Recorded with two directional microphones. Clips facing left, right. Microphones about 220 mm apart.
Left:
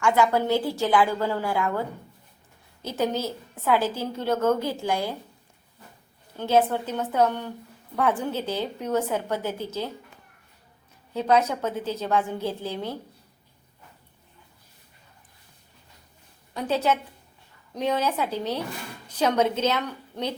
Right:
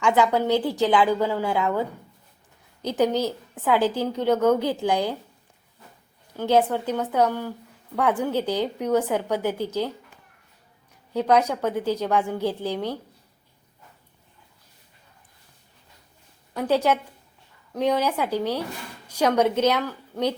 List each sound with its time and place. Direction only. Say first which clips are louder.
0.0 s a woman's voice: right 1 dB; 15° right (ahead or behind)
2.8 s a woman's voice: right 4 dB; 15° right (ahead or behind)
6.3 s a woman's voice: right 1 dB; 15° right (ahead or behind)
11.1 s a woman's voice: right 2 dB; 15° right (ahead or behind)
16.6 s a woman's voice: right 3 dB; 10° right (ahead or behind)